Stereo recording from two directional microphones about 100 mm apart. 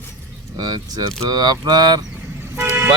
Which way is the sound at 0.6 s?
40° right (ahead or behind).